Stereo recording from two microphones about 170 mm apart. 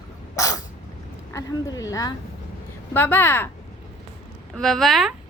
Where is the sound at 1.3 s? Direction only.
20° left (ahead or behind).